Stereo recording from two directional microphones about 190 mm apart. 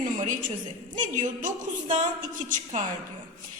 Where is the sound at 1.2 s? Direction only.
40° right (ahead or behind).